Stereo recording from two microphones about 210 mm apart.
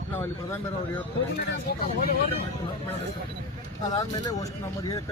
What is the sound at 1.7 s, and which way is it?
Speech, 50° left (ahead or behind).